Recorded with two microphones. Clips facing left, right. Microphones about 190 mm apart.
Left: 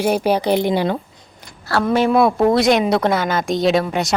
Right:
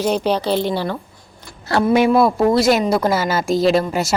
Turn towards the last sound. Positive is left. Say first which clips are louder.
# right 1 dB
turn(degrees=0)  # may be behind; listen again after turning